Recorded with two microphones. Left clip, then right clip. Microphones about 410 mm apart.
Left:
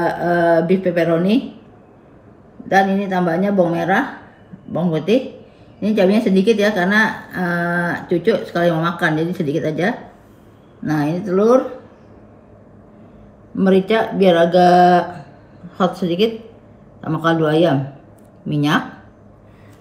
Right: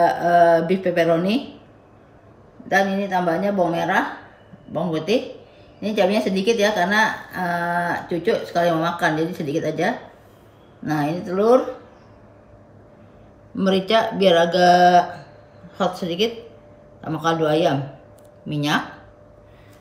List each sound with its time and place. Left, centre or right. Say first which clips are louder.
0.0 s a woman's voice: right 2 dB; centre
2.7 s a woman's voice: left 4 dB; centre
13.6 s a woman's voice: left 3 dB; centre